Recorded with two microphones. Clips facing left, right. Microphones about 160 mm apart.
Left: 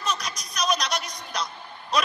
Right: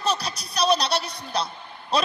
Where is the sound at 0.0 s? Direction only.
30° right (ahead or behind).